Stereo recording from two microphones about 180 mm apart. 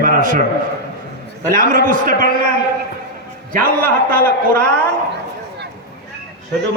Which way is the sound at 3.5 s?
50° right (ahead or behind).